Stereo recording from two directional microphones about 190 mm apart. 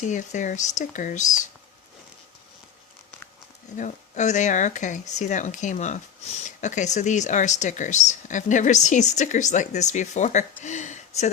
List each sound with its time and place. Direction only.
0.0 s speech: 40° left (ahead or behind)
3.8 s speech: 40° left (ahead or behind)